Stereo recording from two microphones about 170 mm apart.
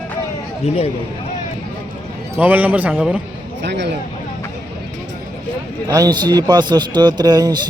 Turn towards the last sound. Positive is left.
turn(degrees=-25)  # may be behind; listen again after turning